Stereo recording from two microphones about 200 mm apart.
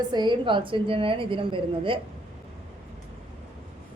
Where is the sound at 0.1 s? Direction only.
20° right (ahead or behind).